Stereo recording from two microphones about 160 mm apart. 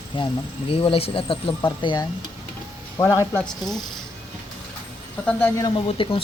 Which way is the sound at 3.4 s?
Centre (ahead or behind).